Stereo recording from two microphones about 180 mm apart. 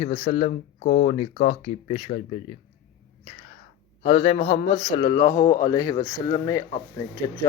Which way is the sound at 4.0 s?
35° left (ahead or behind).